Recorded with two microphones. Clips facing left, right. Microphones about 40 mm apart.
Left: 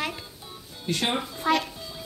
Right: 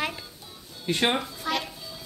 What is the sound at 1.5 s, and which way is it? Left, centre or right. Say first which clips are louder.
Speech: left 6 dB; left.